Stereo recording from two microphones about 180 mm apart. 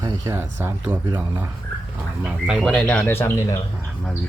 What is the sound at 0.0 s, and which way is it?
Speech, 25° right (ahead or behind).